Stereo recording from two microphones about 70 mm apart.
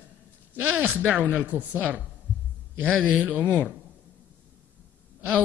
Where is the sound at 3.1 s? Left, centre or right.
Right.